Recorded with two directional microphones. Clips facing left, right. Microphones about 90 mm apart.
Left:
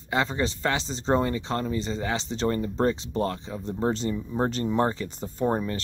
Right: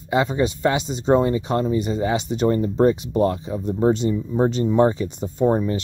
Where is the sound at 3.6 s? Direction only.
5° right (ahead or behind).